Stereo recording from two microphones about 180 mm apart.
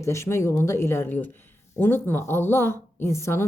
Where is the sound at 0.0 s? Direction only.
15° left (ahead or behind).